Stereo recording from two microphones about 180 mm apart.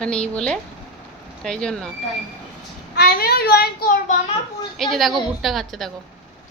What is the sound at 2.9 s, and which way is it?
Speech, 60° left (ahead or behind).